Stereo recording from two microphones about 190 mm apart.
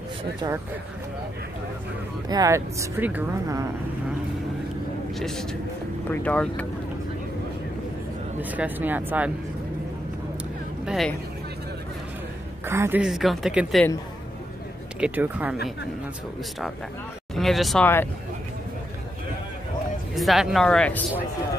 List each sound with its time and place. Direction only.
2.2 s speech: 20° right (ahead or behind)
5.2 s a woman's voice: centre (ahead or behind)
8.4 s speech: 10° right (ahead or behind)
10.9 s a woman's voice: centre (ahead or behind)
12.6 s a woman's voice: 15° right (ahead or behind)
15.0 s speech: 10° right (ahead or behind)
17.4 s a woman's voice: centre (ahead or behind)
20.2 s a woman's voice: centre (ahead or behind)